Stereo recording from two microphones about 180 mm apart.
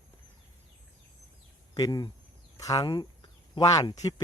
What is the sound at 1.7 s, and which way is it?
Speech, 20° left (ahead or behind).